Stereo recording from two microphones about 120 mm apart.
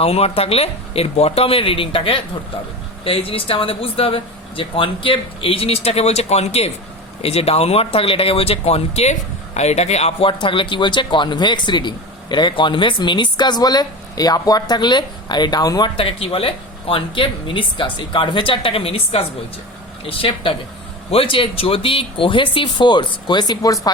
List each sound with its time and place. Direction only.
0.0 s speech: 60° left (ahead or behind); by 15.9 s 35° left (ahead or behind)
16.0 s speech: 50° left (ahead or behind); by 23.9 s 30° left (ahead or behind)